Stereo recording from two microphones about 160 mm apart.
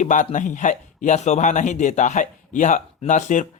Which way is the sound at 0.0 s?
50° left (ahead or behind).